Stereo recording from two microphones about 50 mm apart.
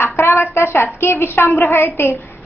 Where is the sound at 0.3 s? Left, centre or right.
Left.